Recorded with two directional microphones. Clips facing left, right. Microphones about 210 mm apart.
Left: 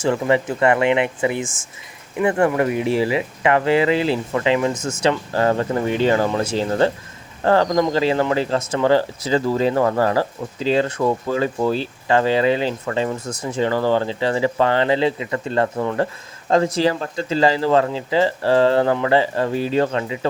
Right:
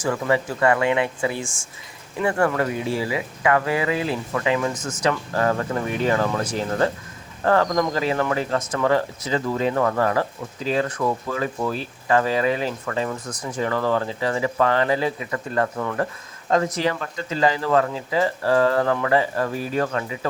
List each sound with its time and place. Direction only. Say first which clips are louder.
0.0 s speech: left 4 dB; 25° left (ahead or behind)